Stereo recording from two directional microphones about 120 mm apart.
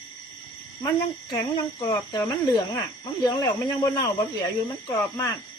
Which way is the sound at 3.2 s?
30° left (ahead or behind).